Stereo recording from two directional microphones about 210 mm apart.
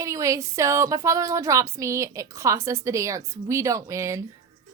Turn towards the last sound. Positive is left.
turn(degrees=-15)  # may be behind; listen again after turning